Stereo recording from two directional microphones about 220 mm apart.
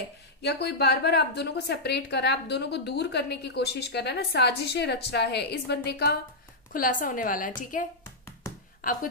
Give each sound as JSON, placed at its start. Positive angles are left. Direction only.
{"t": 0.4, "sound": "a woman's voice", "side_deg": 50}